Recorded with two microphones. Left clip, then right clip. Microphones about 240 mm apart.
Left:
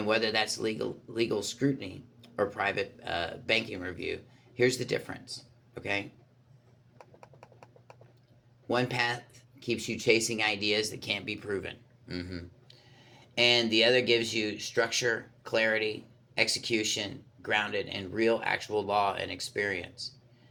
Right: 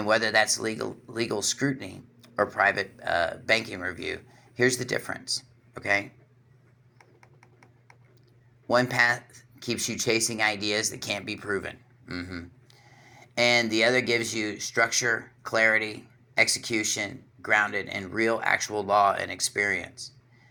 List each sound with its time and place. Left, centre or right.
0.0 s speech: centre
8.6 s speech: centre
12.0 s speech: right
13.1 s a sound: centre
13.9 s speech: centre